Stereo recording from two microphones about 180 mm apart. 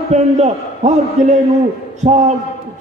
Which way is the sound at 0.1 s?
40° right (ahead or behind).